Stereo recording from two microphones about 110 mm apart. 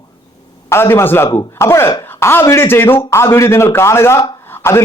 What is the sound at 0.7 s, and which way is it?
A man's voice, 25° left (ahead or behind).